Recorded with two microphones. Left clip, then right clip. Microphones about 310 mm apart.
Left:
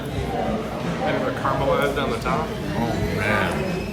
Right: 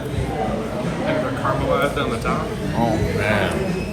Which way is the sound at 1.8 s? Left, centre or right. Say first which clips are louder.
Right 1 dB; left.